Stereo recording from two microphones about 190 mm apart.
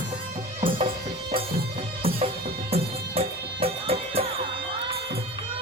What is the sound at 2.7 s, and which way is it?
Music, 30° right (ahead or behind).